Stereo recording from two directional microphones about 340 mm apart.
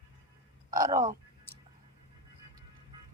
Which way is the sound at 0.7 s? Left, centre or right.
Centre.